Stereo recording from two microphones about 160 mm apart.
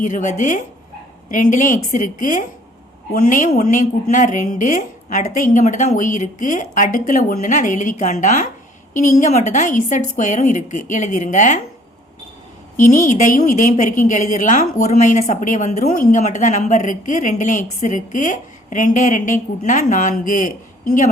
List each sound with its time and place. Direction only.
0.0 s a woman's voice: 55° left (ahead or behind)
12.7 s speech: 55° left (ahead or behind)